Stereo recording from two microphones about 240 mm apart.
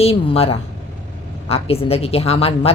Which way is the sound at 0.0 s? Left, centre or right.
Left.